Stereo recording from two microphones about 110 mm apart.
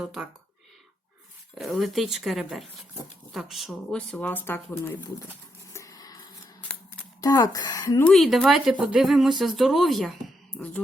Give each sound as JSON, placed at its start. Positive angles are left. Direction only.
{"t": 0.0, "sound": "speech", "side_deg": -5}
{"t": 1.5, "sound": "speech", "side_deg": 0}
{"t": 4.5, "sound": "speech", "side_deg": 20}
{"t": 5.7, "sound": "a sound", "side_deg": 30}
{"t": 7.2, "sound": "speech", "side_deg": 35}
{"t": 8.0, "sound": "speech", "side_deg": 0}